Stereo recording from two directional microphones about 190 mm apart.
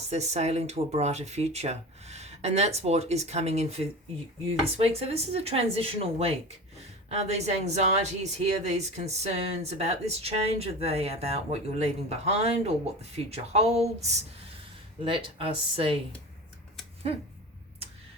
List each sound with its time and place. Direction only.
0.1 s speech: 35° right (ahead or behind)